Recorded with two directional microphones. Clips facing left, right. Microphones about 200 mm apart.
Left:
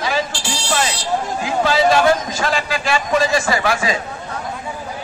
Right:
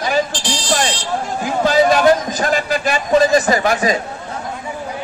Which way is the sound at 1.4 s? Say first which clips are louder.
Right 3 dB; 45° right (ahead or behind).